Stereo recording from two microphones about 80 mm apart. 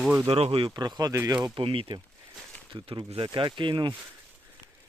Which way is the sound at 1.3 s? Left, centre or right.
Right.